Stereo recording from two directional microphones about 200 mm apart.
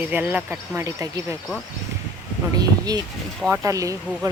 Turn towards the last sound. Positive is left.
turn(degrees=-15)  # may be behind; listen again after turning